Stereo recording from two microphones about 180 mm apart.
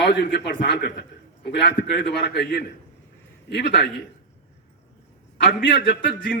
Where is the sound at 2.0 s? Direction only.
65° left (ahead or behind).